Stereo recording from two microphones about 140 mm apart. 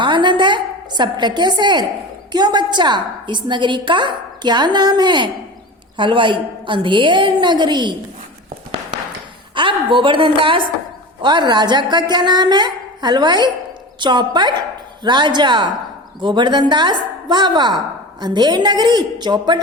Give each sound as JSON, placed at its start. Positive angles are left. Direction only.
{"t": 0.0, "sound": "a sound", "side_deg": -35}
{"t": 2.3, "sound": "a woman's voice", "side_deg": -30}
{"t": 9.6, "sound": "a woman's voice", "side_deg": -35}